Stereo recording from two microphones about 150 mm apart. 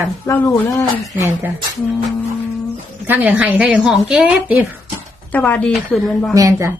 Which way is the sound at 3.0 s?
10° right (ahead or behind).